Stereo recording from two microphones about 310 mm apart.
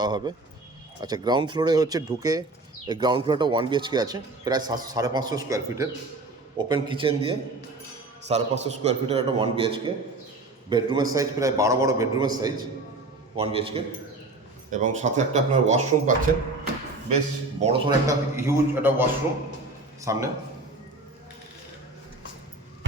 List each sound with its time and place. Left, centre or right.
0.0 s a man's voice: centre
17.6 s speech: centre
20.1 s speech: centre